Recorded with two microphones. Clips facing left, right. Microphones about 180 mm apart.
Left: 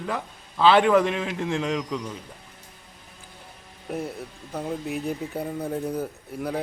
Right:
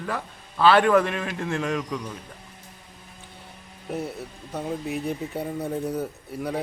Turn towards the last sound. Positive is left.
turn(degrees=0)  # may be behind; listen again after turning